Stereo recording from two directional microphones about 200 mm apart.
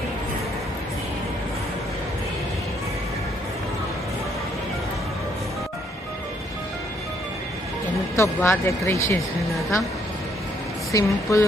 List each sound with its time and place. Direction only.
8.1 s speech: 15° left (ahead or behind)
10.9 s speech: 15° left (ahead or behind)